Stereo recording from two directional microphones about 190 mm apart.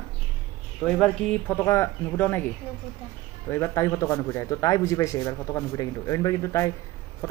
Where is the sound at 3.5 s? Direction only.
15° left (ahead or behind).